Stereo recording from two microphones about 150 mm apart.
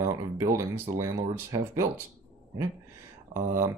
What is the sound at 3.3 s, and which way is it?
Speech, 65° right (ahead or behind).